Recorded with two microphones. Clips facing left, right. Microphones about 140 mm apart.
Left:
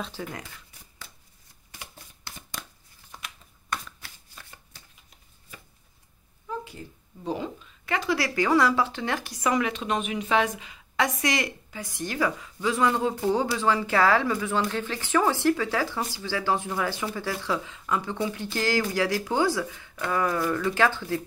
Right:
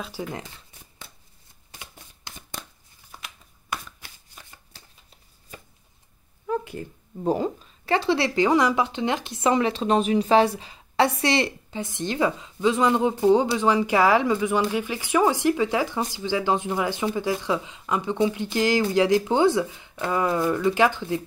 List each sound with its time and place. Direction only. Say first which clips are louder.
0.0 s speech: right 2 dB; 10° right (ahead or behind)
0.3 s a sound: right 4 dB; 25° right (ahead or behind)
3.7 s shuffling cards: even; 15° right (ahead or behind)
6.4 s a woman's voice: right 7 dB; 60° right (ahead or behind); by 21.3 s 20° right (ahead or behind)